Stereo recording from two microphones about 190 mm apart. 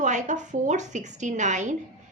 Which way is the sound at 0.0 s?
40° right (ahead or behind).